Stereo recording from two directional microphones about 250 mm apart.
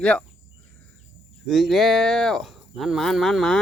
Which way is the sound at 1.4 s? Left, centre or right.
Centre.